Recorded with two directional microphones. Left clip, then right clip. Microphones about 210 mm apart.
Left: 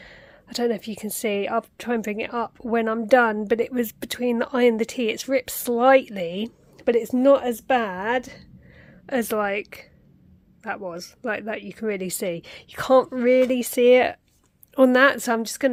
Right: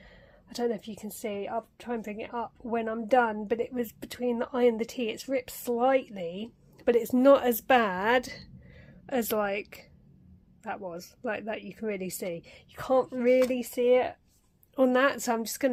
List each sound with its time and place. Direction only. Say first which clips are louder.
0.0 s a woman's voice: left 9 dB; 25° left (ahead or behind)
6.7 s a woman's voice: left 4 dB; 15° left (ahead or behind)
9.0 s a woman's voice: left 5 dB; 15° left (ahead or behind); by 14.2 s 40° left (ahead or behind)
14.8 s a woman's voice: left 8 dB; 30° left (ahead or behind)